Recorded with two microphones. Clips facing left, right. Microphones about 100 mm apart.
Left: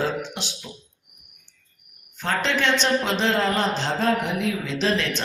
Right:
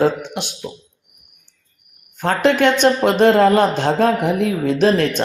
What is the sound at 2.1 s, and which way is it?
A woman's voice, 55° right (ahead or behind).